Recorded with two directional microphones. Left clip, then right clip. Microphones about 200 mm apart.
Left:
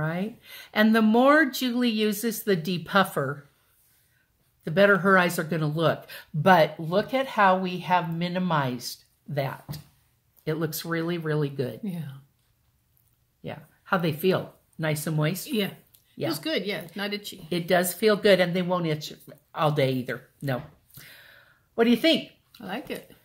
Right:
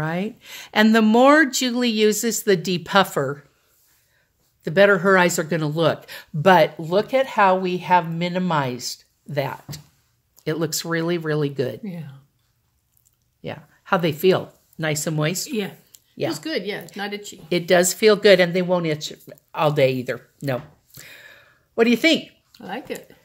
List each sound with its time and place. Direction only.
0.0 s speech: 50° right (ahead or behind)
4.6 s speech: 45° right (ahead or behind)
11.8 s speech: centre (ahead or behind)
13.4 s speech: 50° right (ahead or behind)
16.3 s speech: 5° right (ahead or behind)
17.5 s speech: 50° right (ahead or behind)
22.5 s speech: 5° right (ahead or behind)